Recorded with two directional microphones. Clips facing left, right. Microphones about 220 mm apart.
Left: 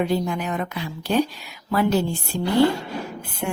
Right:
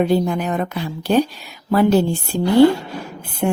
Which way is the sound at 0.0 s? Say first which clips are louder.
Right 5 dB; 40° right (ahead or behind).